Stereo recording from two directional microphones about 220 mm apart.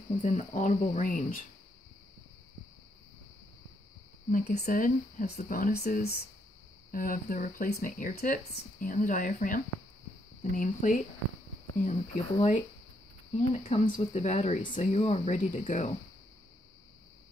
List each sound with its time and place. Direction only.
0.1 s speech: 35° left (ahead or behind)
4.3 s speech: 35° left (ahead or behind)